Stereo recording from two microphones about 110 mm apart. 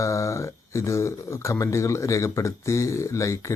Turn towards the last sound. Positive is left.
turn(degrees=30)  # may be behind; listen again after turning